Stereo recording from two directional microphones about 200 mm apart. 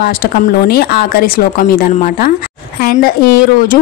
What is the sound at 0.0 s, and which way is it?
A woman's voice, 45° left (ahead or behind).